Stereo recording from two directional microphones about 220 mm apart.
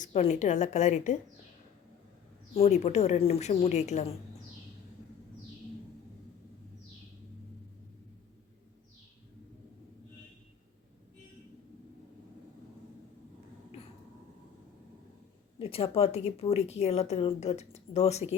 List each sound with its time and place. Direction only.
0.0 s speech: 30° left (ahead or behind)
2.6 s speech: 30° left (ahead or behind)
15.5 s a woman's voice: 25° left (ahead or behind)